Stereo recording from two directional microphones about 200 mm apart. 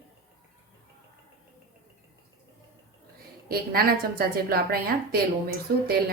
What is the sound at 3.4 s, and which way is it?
A woman's voice, 50° right (ahead or behind).